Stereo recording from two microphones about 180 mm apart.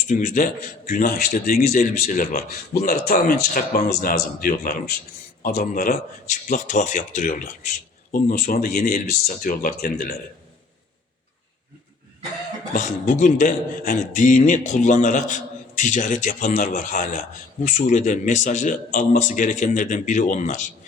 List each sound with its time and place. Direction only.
0.1 s a man's voice: 45° left (ahead or behind)
12.7 s a man's voice: 45° left (ahead or behind)